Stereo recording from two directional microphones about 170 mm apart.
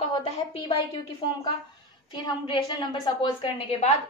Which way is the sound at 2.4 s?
25° left (ahead or behind).